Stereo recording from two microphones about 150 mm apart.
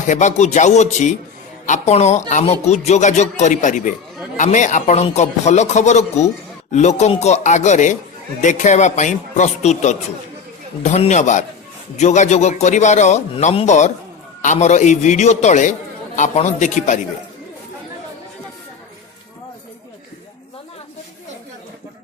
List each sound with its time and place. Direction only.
0.1 s a man's voice: 55° left (ahead or behind)